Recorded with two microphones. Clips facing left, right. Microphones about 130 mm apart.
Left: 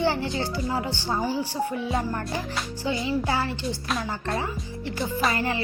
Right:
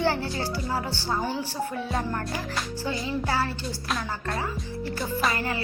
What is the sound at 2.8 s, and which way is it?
Speech, 15° left (ahead or behind).